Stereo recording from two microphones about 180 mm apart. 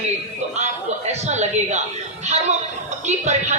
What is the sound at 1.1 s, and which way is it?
Speech, 40° right (ahead or behind).